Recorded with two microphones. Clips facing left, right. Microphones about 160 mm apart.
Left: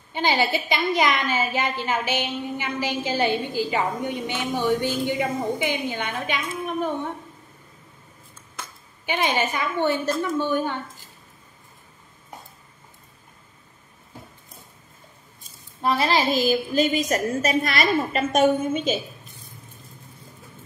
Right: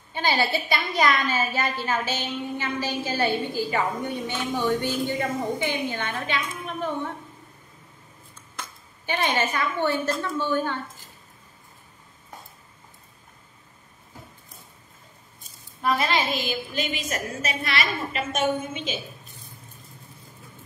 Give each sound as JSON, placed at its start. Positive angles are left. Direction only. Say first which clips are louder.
{"t": 0.1, "sound": "a woman's voice", "louder": "left 2 dB", "side_deg": 20}
{"t": 8.5, "sound": "a woman's voice", "louder": "even", "side_deg": 15}
{"t": 15.8, "sound": "a woman's voice", "louder": "left 3 dB", "side_deg": 30}